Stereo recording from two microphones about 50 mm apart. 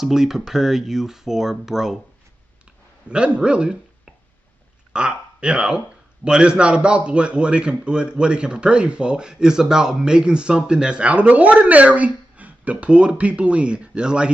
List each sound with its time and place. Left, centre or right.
0.0 s speech: centre
3.1 s a man's voice: right